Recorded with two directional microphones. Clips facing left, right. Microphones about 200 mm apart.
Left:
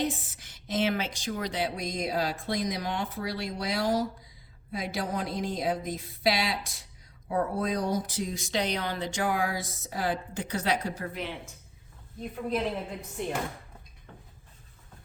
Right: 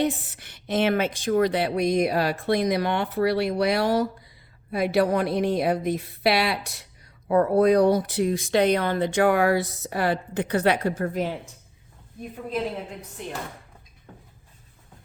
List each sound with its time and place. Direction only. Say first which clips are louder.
0.0 s a woman's voice: right 6 dB; 65° right (ahead or behind); by 11.3 s 45° right (ahead or behind)